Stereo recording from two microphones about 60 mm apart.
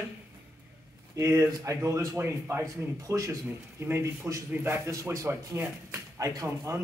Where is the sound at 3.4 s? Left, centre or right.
Right.